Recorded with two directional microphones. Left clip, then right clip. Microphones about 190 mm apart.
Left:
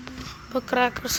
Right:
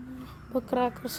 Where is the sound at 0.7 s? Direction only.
15° right (ahead or behind).